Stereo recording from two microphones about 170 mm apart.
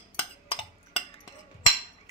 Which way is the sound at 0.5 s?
35° left (ahead or behind).